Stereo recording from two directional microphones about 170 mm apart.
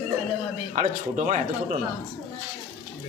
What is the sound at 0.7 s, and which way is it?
Speech, 45° right (ahead or behind).